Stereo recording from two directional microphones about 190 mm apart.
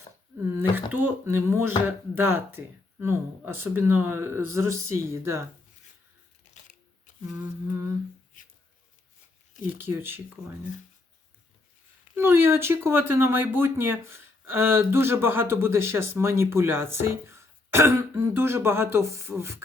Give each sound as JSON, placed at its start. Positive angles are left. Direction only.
{"t": 0.5, "sound": "speech", "side_deg": -10}
{"t": 6.5, "sound": "camera", "side_deg": 40}
{"t": 9.7, "sound": "speech", "side_deg": -10}
{"t": 12.1, "sound": "speech", "side_deg": -10}